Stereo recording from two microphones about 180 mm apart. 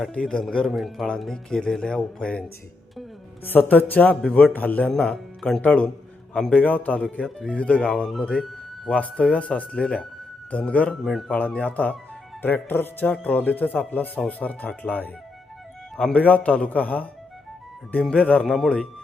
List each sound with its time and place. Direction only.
0.0 s speech: centre (ahead or behind)
3.4 s speech: 10° left (ahead or behind)